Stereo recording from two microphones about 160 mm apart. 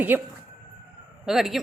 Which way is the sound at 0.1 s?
10° right (ahead or behind).